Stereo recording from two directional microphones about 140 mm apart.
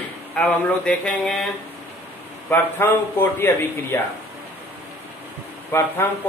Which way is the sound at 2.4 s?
15° left (ahead or behind).